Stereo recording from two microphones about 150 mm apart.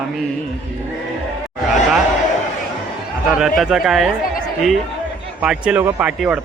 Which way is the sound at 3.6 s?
5° right (ahead or behind).